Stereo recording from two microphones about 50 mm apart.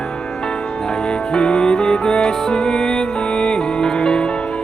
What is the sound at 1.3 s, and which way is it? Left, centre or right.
Music, centre.